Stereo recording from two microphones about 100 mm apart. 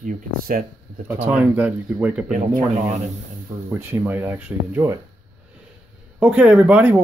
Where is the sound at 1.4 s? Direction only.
10° right (ahead or behind).